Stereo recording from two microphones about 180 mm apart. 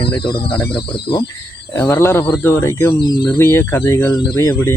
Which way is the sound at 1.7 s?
15° left (ahead or behind).